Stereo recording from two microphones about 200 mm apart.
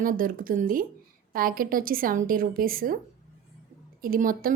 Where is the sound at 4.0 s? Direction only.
45° right (ahead or behind).